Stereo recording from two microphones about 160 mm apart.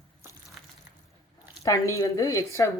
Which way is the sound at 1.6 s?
20° left (ahead or behind).